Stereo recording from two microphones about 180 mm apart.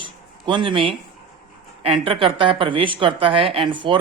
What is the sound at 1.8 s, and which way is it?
Speech, 30° right (ahead or behind).